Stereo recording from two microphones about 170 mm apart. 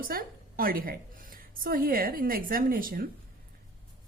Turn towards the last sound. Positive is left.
turn(degrees=-55)  # may be behind; listen again after turning